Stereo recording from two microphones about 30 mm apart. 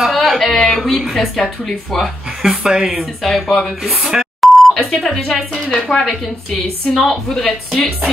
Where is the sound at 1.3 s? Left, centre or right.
Left.